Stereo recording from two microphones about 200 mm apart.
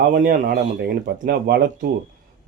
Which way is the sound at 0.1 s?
40° right (ahead or behind).